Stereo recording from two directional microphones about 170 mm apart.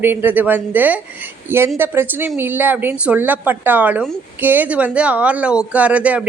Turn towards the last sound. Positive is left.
turn(degrees=-10)  # may be behind; listen again after turning